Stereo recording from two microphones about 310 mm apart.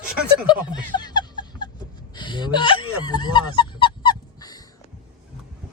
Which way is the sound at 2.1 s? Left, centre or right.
Centre.